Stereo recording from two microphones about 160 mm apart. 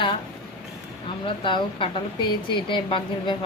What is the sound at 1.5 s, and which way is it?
A woman's voice, 30° left (ahead or behind).